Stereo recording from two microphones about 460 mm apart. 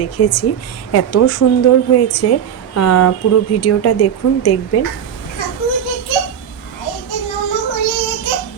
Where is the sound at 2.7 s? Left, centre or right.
Left.